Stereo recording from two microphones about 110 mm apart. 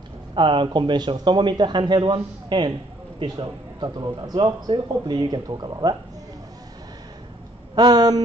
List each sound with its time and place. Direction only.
0.3 s a man's voice: 50° right (ahead or behind)
7.7 s speech: 35° right (ahead or behind)